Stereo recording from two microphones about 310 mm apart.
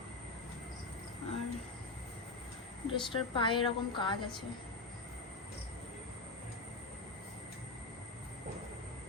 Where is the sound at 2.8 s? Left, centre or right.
Centre.